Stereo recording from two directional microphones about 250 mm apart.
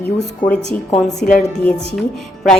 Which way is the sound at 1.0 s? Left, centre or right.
Centre.